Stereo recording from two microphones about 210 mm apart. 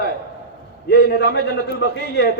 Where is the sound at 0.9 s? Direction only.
50° left (ahead or behind).